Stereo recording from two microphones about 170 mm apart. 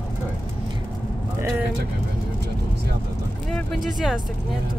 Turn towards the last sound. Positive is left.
turn(degrees=0)  # may be behind; listen again after turning